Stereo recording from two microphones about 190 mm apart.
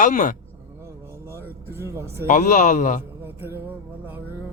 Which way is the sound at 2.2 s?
45° left (ahead or behind).